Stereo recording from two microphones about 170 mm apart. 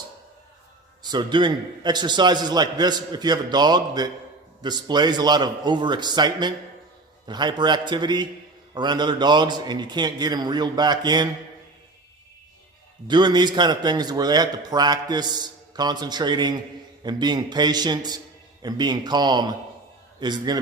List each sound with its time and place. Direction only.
1.0 s a man's voice: 25° right (ahead or behind)
13.1 s a man's voice: 25° right (ahead or behind)